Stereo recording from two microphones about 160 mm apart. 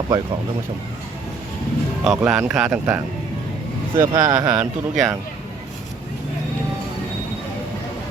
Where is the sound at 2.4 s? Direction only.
5° right (ahead or behind).